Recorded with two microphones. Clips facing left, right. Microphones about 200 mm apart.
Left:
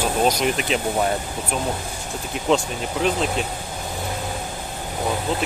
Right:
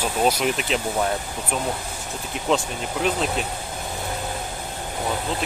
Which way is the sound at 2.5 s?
Centre (ahead or behind).